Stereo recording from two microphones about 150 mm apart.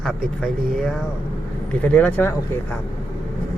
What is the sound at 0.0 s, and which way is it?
Speech, centre (ahead or behind).